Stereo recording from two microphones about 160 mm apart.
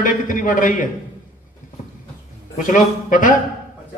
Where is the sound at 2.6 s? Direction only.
55° left (ahead or behind).